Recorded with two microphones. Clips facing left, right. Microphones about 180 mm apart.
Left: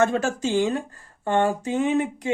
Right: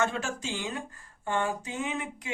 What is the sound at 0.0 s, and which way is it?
Speech, 40° left (ahead or behind).